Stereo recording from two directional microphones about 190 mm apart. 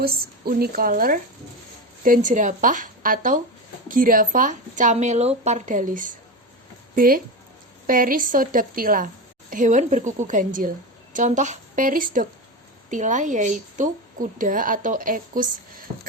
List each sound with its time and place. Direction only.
0.0 s a woman's voice: 55° right (ahead or behind)